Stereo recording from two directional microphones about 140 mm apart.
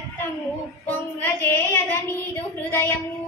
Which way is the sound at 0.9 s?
15° left (ahead or behind).